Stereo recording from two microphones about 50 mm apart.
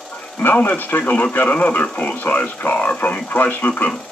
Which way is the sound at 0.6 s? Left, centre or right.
Left.